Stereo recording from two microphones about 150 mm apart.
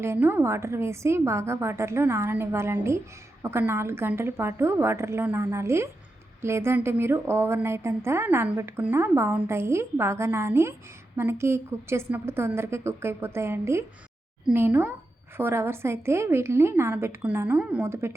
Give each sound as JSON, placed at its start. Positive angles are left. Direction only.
{"t": 0.0, "sound": "a woman's voice", "side_deg": -15}